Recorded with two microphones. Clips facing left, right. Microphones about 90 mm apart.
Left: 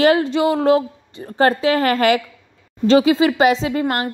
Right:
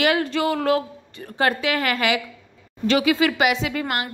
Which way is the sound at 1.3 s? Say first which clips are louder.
Left 6 dB; 35° left (ahead or behind).